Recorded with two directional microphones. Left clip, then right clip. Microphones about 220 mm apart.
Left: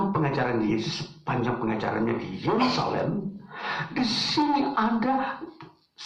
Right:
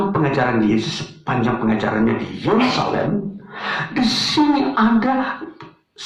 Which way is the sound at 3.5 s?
45° right (ahead or behind).